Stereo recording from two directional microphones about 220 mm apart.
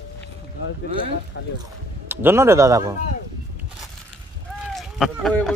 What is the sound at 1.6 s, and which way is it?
Speech, 10° right (ahead or behind).